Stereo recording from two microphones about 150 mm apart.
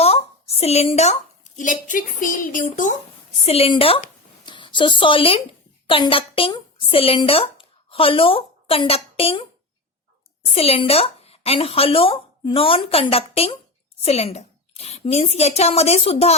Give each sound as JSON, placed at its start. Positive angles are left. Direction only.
{"t": 0.0, "sound": "a sound", "side_deg": 40}
{"t": 1.5, "sound": "a woman's voice", "side_deg": 60}
{"t": 3.4, "sound": "a woman's voice", "side_deg": 40}
{"t": 10.5, "sound": "a woman's voice", "side_deg": 40}